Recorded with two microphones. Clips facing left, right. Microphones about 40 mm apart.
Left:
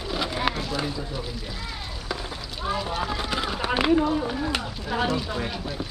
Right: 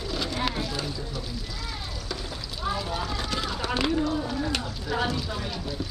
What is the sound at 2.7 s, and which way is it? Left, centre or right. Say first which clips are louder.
Speech: left 6 dB; left.